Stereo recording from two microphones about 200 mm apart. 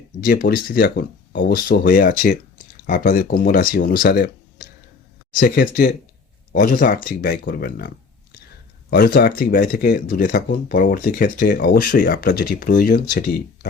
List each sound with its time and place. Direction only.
0.3 s speech: 45° left (ahead or behind)